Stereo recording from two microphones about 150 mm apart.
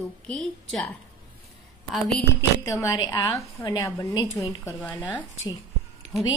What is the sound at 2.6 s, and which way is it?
Speech, 20° left (ahead or behind).